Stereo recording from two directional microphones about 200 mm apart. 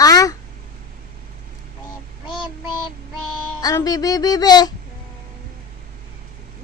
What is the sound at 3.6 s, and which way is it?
Speech, 20° left (ahead or behind).